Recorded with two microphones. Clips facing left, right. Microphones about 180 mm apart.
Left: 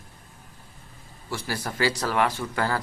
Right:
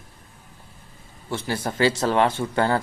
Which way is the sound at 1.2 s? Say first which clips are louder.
Right 4 dB; 25° right (ahead or behind).